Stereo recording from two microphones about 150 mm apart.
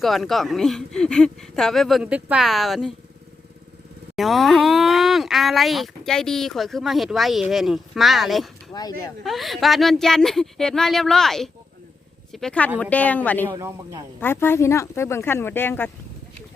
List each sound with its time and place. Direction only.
0.0 s speech: centre (ahead or behind)
4.1 s speech: centre (ahead or behind)
8.7 s speech: 25° left (ahead or behind)
9.2 s speech: centre (ahead or behind)
13.5 s a man's voice: 20° right (ahead or behind)
14.2 s speech: 15° left (ahead or behind)